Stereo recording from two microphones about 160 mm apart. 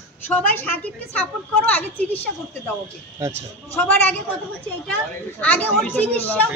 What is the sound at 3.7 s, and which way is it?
Speech, 10° left (ahead or behind).